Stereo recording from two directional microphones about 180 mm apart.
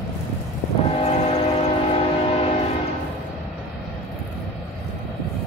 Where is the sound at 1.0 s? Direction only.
35° left (ahead or behind).